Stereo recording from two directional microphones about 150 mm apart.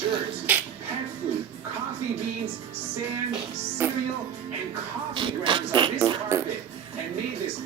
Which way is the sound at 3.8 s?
15° right (ahead or behind).